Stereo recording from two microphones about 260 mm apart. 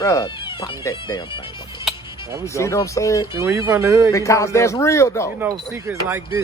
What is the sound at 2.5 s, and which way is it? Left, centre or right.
Speech, centre.